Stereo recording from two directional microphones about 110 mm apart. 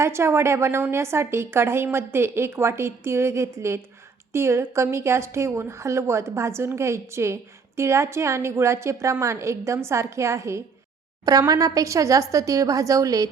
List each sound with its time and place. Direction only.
0.0 s a woman's voice: 25° right (ahead or behind)